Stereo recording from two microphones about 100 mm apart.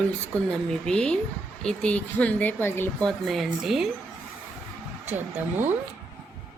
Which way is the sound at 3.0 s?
Centre (ahead or behind).